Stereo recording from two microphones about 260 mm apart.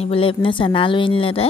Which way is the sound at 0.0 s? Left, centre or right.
Left.